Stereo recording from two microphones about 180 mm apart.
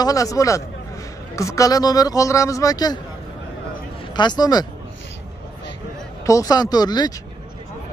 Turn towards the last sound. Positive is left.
turn(degrees=20)  # may be behind; listen again after turning